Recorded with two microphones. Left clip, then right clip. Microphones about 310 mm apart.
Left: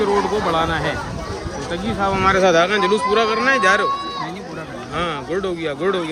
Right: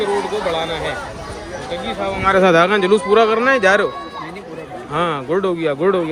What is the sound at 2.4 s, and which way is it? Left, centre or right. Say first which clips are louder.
Speech: right 2 dB; centre.